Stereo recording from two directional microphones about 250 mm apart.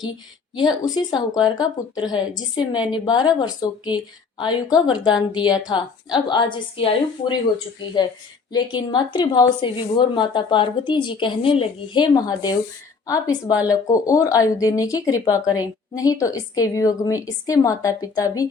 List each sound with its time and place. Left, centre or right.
0.5 s speech: centre
8.5 s a woman's voice: centre